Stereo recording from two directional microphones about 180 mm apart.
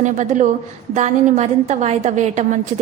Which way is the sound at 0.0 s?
45° right (ahead or behind).